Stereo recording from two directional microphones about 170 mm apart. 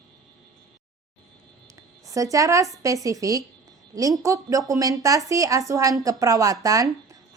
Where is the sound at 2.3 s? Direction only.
20° right (ahead or behind).